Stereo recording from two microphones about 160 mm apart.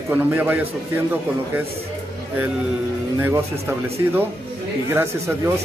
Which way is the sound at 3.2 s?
15° right (ahead or behind).